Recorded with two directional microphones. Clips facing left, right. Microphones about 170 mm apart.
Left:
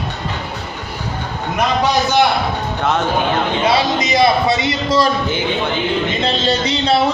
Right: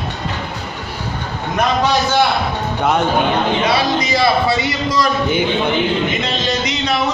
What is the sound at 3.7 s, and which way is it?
A man's voice, 20° left (ahead or behind).